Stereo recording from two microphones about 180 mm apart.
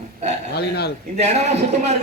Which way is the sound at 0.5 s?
65° left (ahead or behind).